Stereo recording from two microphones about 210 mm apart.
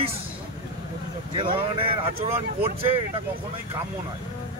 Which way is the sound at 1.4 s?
25° right (ahead or behind).